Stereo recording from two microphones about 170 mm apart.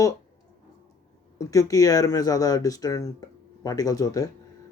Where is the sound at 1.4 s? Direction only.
20° left (ahead or behind).